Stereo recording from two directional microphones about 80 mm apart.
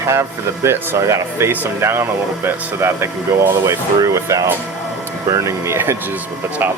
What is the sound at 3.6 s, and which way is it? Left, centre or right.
Speech, right.